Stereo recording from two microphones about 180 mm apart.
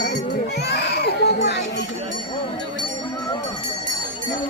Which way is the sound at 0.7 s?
65° left (ahead or behind).